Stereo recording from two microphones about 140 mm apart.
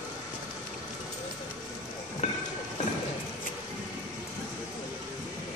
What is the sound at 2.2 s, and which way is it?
Train, 55° left (ahead or behind).